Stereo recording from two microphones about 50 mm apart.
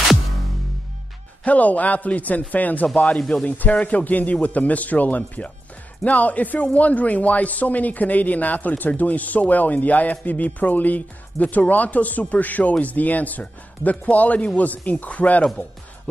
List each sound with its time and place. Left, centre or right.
1.4 s speech: left
3.1 s speech: left
3.4 s speech: left